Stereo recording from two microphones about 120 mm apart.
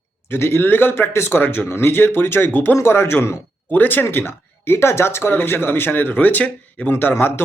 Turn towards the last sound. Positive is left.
turn(degrees=15)  # may be behind; listen again after turning